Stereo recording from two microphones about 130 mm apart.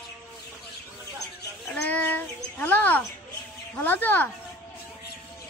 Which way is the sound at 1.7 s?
10° left (ahead or behind).